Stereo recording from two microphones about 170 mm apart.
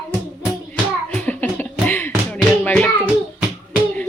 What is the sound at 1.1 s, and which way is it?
Music, 5° left (ahead or behind).